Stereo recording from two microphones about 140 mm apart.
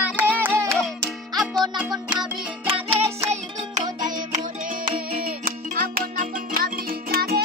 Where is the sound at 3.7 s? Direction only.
60° right (ahead or behind).